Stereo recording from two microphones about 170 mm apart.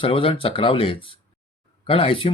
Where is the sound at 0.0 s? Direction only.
30° left (ahead or behind).